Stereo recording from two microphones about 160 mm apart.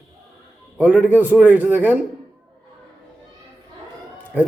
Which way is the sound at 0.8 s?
10° right (ahead or behind).